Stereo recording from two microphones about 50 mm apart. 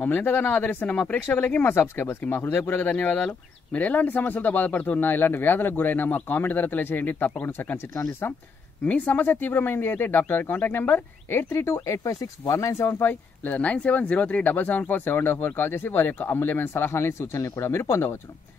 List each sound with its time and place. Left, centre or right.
0.0 s speech: left
8.8 s speech: left
12.7 s speech: left
13.1 s speech: left